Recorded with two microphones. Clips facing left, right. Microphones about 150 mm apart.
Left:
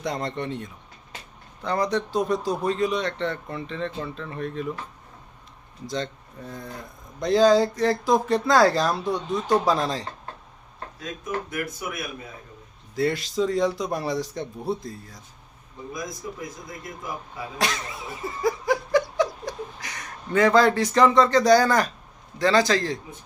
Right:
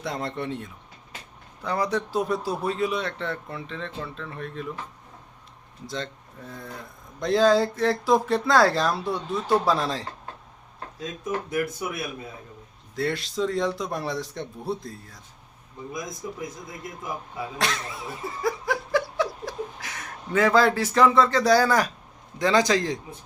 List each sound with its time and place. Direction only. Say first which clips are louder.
0.0 s speech: left 2 dB; centre (ahead or behind)
5.8 s speech: left 3 dB; centre (ahead or behind)
11.5 s speech: right 4 dB; 30° right (ahead or behind)
13.0 s speech: left 3 dB; centre (ahead or behind)
16.2 s speech: even; 20° right (ahead or behind)
17.6 s a sound: left 2 dB; centre (ahead or behind)
22.4 s a man's voice: left 1 dB; 20° right (ahead or behind)